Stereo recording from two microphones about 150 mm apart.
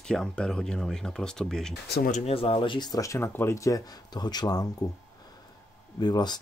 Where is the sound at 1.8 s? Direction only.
90° left.